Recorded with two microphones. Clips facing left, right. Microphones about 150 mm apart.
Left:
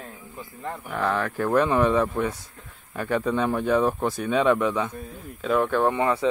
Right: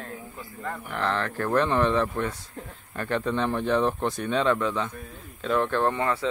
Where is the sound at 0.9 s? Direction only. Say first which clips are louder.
Left 3 dB; 10° left (ahead or behind).